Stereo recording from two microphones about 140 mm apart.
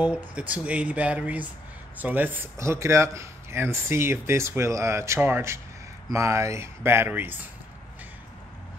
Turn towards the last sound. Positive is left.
turn(degrees=-15)  # may be behind; listen again after turning